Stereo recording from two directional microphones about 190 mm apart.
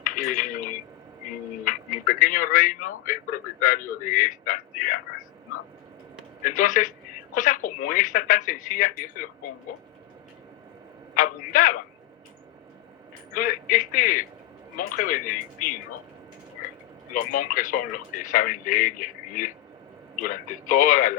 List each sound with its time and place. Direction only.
0.0 s a sound: 45° left (ahead or behind)
1.6 s speech: 45° left (ahead or behind)
6.4 s speech: 45° left (ahead or behind)
11.1 s speech: 45° left (ahead or behind)
13.3 s speech: 45° left (ahead or behind)
17.2 s speech: 45° left (ahead or behind)